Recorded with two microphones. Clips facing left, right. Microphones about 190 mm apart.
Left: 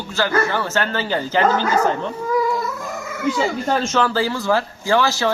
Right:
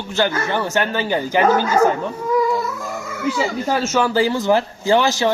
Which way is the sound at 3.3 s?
5° right (ahead or behind).